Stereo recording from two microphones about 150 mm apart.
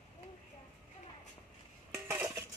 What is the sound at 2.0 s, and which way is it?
Dishes, 15° right (ahead or behind).